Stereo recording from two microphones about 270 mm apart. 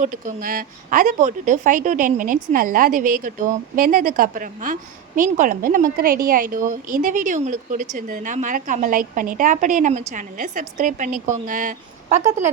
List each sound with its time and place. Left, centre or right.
0.0 s a woman's voice: right